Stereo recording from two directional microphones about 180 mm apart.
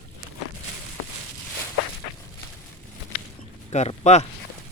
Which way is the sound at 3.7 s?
40° left (ahead or behind).